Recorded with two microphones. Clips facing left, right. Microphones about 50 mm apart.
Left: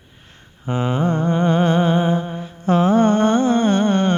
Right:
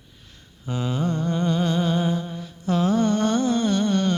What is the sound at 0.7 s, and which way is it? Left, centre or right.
Humming, left.